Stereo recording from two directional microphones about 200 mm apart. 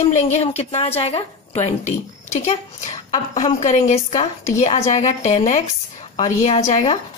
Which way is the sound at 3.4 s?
35° left (ahead or behind).